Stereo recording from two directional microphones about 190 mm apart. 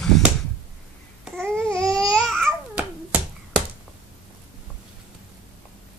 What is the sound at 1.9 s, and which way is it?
Babbling, 5° left (ahead or behind).